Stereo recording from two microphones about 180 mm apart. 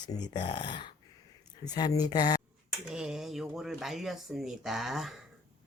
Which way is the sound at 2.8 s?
5° right (ahead or behind).